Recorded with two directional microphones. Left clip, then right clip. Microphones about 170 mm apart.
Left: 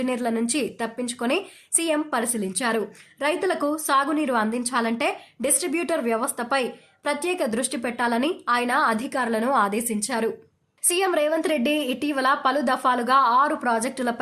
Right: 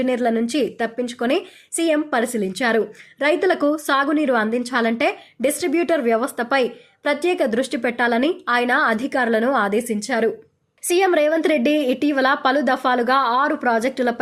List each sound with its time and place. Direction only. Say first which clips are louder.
0.0 s a woman's voice: right 6 dB; 20° right (ahead or behind)